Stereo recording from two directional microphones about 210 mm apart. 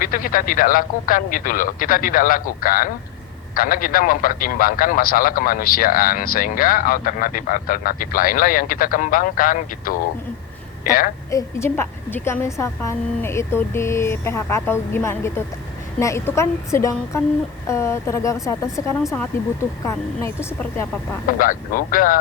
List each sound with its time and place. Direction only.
0.0 s a man's voice: 40° left (ahead or behind)
11.3 s a woman's voice: 15° left (ahead or behind)
21.3 s speech: 40° left (ahead or behind)